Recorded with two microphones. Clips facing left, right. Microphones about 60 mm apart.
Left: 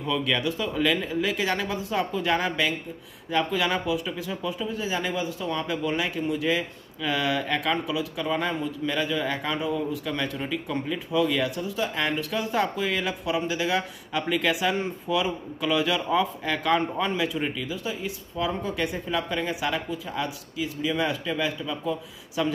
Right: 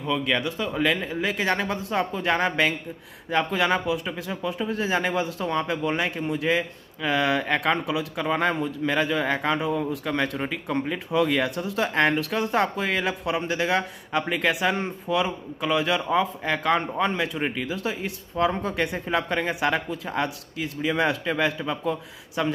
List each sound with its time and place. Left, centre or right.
0.6 s speech: right
5.5 s speech: right
14.2 s speech: right
17.1 s speech: right
21.5 s speech: right